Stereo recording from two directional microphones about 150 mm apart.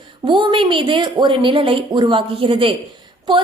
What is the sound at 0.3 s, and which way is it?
A woman's voice, 35° right (ahead or behind).